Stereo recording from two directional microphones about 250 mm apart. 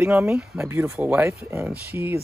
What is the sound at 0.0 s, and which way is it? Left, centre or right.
Speech, centre.